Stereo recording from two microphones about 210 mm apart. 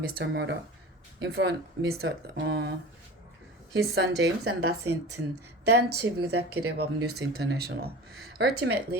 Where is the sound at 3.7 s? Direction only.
50° right (ahead or behind).